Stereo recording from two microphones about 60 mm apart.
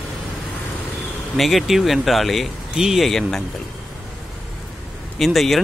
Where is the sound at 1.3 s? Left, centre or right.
Centre.